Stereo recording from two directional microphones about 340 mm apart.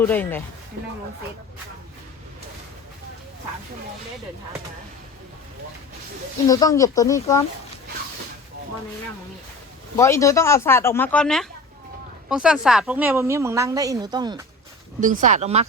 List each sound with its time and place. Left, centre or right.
0.0 s speech: centre
6.5 s speech: centre
10.0 s a woman's voice: centre